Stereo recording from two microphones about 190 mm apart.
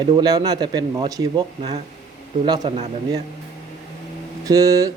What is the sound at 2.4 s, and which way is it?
Speech, 20° right (ahead or behind).